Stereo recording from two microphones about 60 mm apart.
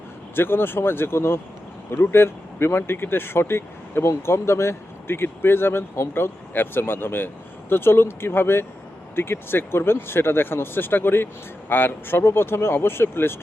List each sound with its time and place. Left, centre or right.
0.3 s speech: left